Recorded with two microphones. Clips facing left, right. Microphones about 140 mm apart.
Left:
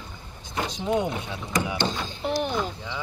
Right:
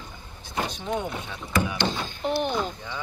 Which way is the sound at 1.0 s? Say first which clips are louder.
Left 4 dB; 20° left (ahead or behind).